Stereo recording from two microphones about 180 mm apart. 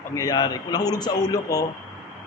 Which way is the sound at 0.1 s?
20° left (ahead or behind).